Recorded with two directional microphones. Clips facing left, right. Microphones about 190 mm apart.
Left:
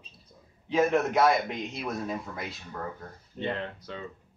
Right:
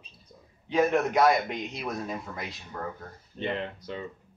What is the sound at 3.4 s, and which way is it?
Speech, 15° right (ahead or behind).